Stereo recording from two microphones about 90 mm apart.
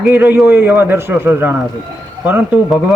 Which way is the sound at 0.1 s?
20° right (ahead or behind).